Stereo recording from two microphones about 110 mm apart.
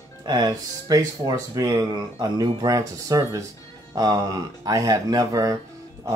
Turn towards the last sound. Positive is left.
turn(degrees=-30)  # may be behind; listen again after turning